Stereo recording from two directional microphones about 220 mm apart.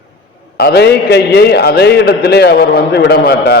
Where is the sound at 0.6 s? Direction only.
45° left (ahead or behind).